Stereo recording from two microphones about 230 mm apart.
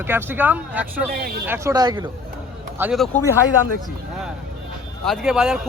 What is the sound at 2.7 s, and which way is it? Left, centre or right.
Speech, centre.